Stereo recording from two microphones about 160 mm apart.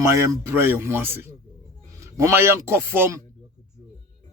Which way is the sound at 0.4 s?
15° right (ahead or behind).